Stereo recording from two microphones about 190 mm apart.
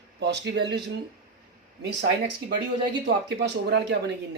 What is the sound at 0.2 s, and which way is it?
Speech, 60° right (ahead or behind).